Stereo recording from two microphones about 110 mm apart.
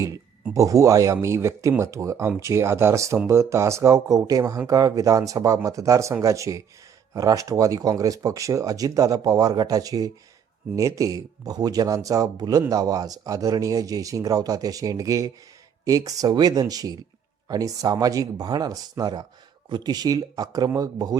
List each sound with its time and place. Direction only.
0.5 s speech: 30° right (ahead or behind)